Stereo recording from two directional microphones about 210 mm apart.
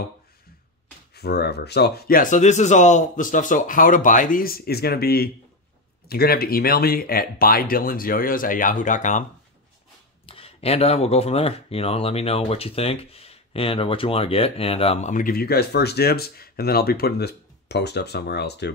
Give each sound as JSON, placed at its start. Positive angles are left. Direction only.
{"t": 1.1, "sound": "speech", "side_deg": 50}
{"t": 10.2, "sound": "speech", "side_deg": 25}